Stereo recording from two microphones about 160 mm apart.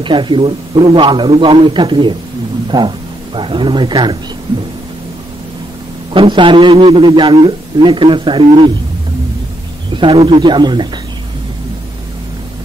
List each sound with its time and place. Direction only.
0.0 s a man's voice: 30° right (ahead or behind)
6.1 s a man's voice: 30° right (ahead or behind)
9.9 s a man's voice: 30° right (ahead or behind)